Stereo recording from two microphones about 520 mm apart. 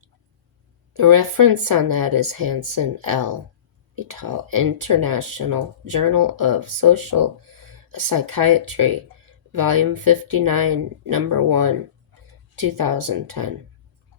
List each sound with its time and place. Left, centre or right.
0.9 s speech: right